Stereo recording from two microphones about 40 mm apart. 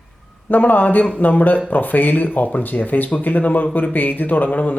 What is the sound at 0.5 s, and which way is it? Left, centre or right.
Speech, left.